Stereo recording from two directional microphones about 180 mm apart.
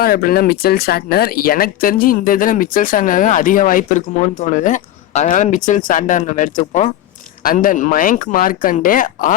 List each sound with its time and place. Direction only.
0.0 s speech: 55° left (ahead or behind)